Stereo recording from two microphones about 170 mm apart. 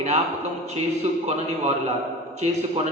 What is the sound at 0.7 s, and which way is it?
Speech, 40° right (ahead or behind).